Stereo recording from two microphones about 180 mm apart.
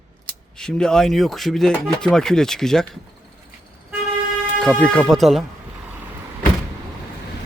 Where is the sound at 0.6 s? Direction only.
5° left (ahead or behind).